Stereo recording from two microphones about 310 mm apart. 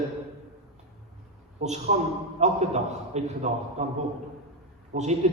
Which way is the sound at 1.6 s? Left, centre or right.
Right.